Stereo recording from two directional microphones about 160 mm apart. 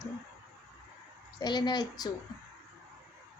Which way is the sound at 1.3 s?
25° left (ahead or behind).